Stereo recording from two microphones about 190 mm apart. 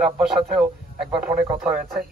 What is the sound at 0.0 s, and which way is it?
A man's voice, centre (ahead or behind).